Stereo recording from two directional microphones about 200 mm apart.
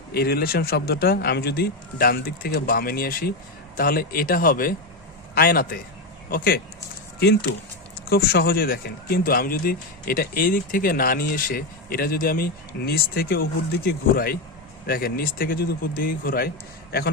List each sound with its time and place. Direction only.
0.1 s speech: 50° left (ahead or behind)
8.1 s speech: 50° left (ahead or behind)